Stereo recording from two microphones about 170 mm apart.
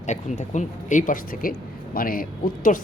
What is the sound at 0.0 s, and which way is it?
Speech, 45° left (ahead or behind).